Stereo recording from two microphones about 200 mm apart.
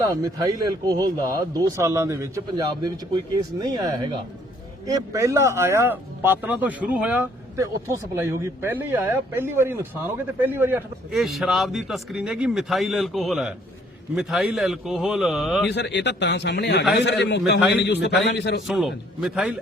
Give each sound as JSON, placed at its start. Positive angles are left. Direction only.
{"t": 0.0, "sound": "a man's voice", "side_deg": -15}
{"t": 15.7, "sound": "a man's voice", "side_deg": 60}
{"t": 18.7, "sound": "a man's voice", "side_deg": 0}